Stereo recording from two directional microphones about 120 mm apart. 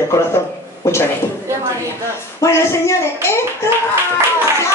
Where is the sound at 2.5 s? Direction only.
25° left (ahead or behind).